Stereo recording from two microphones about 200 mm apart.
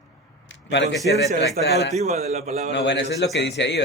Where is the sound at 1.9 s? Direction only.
35° right (ahead or behind).